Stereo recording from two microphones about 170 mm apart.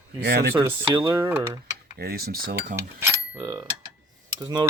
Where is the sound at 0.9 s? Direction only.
25° right (ahead or behind).